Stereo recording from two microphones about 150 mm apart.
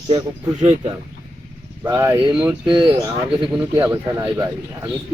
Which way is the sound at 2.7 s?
35° right (ahead or behind).